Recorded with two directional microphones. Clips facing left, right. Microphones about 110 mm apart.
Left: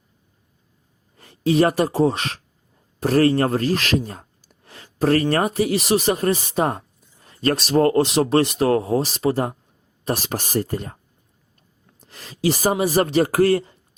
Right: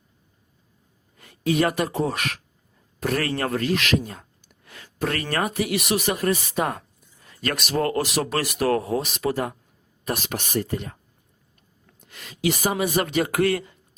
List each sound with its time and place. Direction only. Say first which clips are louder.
1.1 s speech: left 4 dB; 30° left (ahead or behind)
11.9 s speech: left 4 dB; 35° left (ahead or behind)